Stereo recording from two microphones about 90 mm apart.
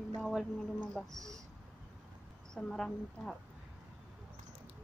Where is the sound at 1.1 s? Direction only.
40° right (ahead or behind).